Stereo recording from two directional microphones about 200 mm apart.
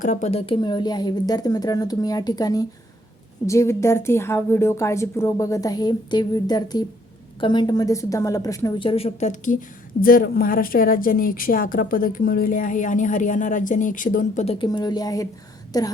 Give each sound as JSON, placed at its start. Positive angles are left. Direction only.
{"t": 0.0, "sound": "a woman's voice", "side_deg": 35}
{"t": 14.6, "sound": "speech", "side_deg": 20}